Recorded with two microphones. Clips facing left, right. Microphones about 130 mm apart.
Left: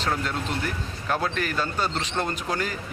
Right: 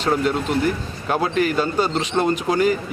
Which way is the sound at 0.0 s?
15° right (ahead or behind).